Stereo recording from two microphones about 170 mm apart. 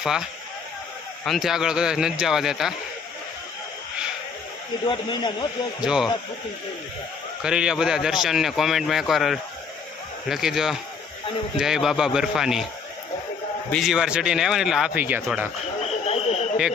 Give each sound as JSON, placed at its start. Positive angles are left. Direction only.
{"t": 0.0, "sound": "speech", "side_deg": -5}
{"t": 4.9, "sound": "a man's voice", "side_deg": 25}
{"t": 5.8, "sound": "speech", "side_deg": -5}
{"t": 7.4, "sound": "speech", "side_deg": -5}
{"t": 13.7, "sound": "speech", "side_deg": 0}
{"t": 15.8, "sound": "frog", "side_deg": 40}